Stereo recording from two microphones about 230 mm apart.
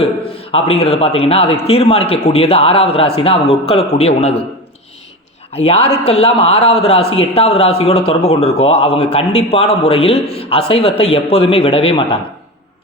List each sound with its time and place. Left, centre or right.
0.5 s a man's voice: left
5.5 s a man's voice: left